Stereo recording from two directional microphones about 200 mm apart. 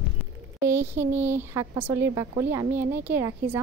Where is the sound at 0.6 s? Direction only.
10° right (ahead or behind).